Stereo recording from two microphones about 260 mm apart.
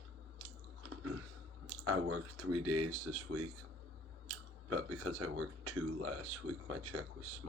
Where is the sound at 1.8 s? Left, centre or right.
Right.